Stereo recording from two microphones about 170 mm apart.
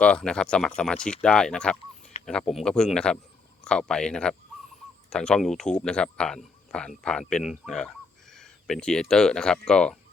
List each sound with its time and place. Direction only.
0.0 s speech: 5° left (ahead or behind)
2.1 s a sound: 40° left (ahead or behind)
2.5 s speech: centre (ahead or behind)